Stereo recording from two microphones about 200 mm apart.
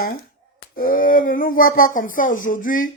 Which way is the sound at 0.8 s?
45° left (ahead or behind).